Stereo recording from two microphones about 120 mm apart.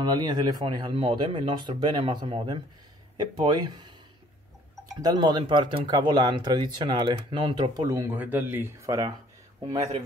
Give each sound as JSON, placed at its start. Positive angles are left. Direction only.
{"t": 0.2, "sound": "speech", "side_deg": -35}
{"t": 5.0, "sound": "speech", "side_deg": -35}
{"t": 8.2, "sound": "speech", "side_deg": -15}